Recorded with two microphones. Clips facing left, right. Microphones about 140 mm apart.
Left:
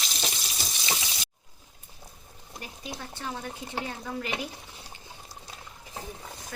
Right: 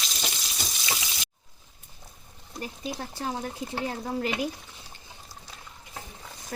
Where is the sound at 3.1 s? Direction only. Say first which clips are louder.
Right 4 dB; 35° right (ahead or behind).